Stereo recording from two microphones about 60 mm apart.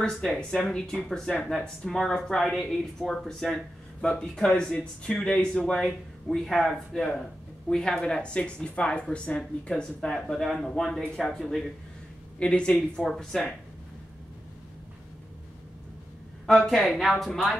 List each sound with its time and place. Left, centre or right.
0.1 s speech: centre
0.4 s speech: centre
10.1 s speech: centre
12.4 s speech: centre
13.0 s speech: centre
16.4 s speech: centre